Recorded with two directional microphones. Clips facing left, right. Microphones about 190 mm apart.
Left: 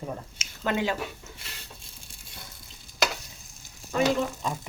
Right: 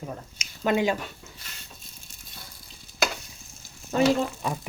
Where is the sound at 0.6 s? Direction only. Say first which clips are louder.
Right 4 dB; 15° right (ahead or behind).